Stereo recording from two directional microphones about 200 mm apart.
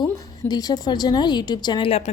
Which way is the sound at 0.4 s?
20° left (ahead or behind).